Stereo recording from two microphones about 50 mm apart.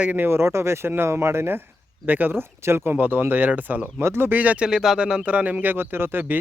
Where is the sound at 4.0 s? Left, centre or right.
Right.